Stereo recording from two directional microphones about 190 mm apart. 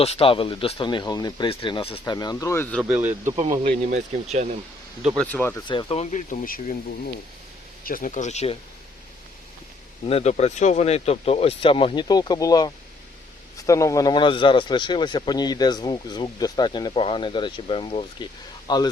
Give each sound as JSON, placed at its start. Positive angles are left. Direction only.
{"t": 0.0, "sound": "a man's voice", "side_deg": 30}
{"t": 2.9, "sound": "speech", "side_deg": -10}
{"t": 3.8, "sound": "speech", "side_deg": -35}
{"t": 5.0, "sound": "speech", "side_deg": 5}
{"t": 5.6, "sound": "speech", "side_deg": 30}
{"t": 7.9, "sound": "speech", "side_deg": 45}
{"t": 10.1, "sound": "a man's voice", "side_deg": 35}